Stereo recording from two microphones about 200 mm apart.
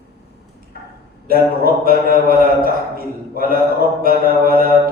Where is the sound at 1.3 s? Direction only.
45° right (ahead or behind).